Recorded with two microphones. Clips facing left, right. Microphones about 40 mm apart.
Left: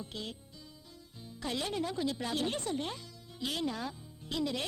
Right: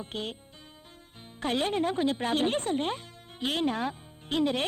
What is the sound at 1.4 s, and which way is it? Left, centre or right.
Speech, right.